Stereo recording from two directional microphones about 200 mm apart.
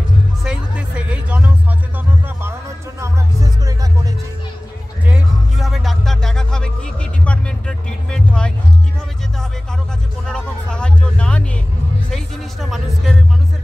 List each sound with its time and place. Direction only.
0.4 s music: 5° right (ahead or behind)
3.0 s music: 15° right (ahead or behind)
5.0 s music: 5° right (ahead or behind)
10.2 s a sound: 5° left (ahead or behind)
12.1 s music: centre (ahead or behind)